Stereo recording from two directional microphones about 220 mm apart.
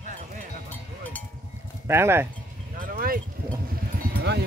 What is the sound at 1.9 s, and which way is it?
Speech, 10° right (ahead or behind).